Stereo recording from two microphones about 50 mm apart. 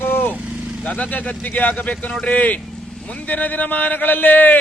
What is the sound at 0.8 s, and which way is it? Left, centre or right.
A man's voice, left.